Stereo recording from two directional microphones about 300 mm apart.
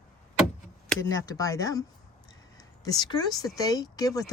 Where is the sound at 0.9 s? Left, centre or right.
Centre.